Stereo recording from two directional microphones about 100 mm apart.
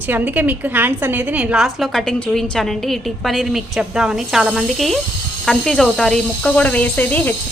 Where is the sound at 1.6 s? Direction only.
Centre (ahead or behind).